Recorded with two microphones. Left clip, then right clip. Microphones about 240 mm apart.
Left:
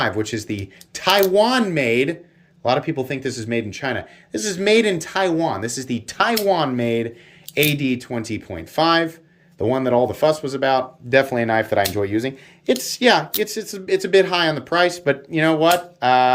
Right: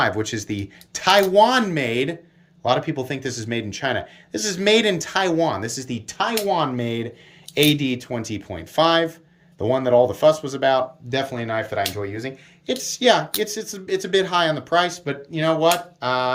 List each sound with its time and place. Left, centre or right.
0.0 s a man's voice: centre
11.2 s speech: centre
11.9 s speech: left
12.6 s speech: centre